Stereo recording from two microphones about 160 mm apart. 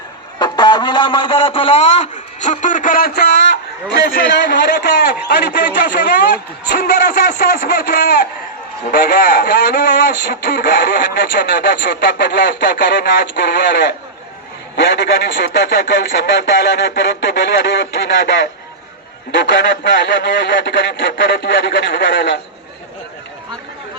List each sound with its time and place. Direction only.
0.3 s a man's voice: 25° left (ahead or behind); by 3.4 s 85° left
3.9 s speech: 65° left (ahead or behind)
13.3 s speech: 70° left (ahead or behind)
14.8 s speech: 90° left; by 16.3 s 75° left (ahead or behind)
16.9 s speech: 90° left